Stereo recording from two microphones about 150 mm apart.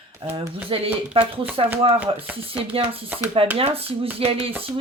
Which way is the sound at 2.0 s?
10° right (ahead or behind).